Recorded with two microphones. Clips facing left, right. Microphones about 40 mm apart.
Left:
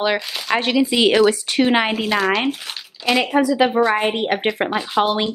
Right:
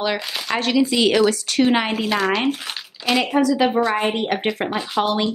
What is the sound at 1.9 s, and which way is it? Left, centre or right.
A woman's voice, centre.